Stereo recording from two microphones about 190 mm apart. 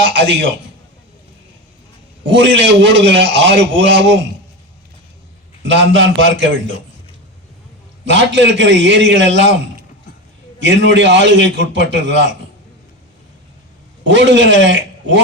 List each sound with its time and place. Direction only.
0.0 s a man's voice: 65° right (ahead or behind)
2.3 s a man's voice: 65° right (ahead or behind)
5.6 s a man's voice: 70° right (ahead or behind)
8.0 s a man's voice: 70° right (ahead or behind)
10.6 s a man's voice: 70° right (ahead or behind)
14.0 s a man's voice: 70° right (ahead or behind)